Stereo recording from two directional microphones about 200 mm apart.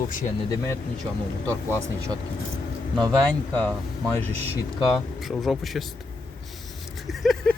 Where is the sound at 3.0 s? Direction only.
20° right (ahead or behind).